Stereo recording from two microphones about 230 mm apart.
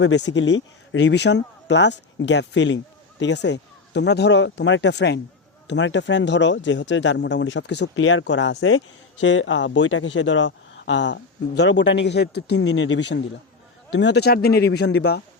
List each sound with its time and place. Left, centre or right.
0.0 s speech: left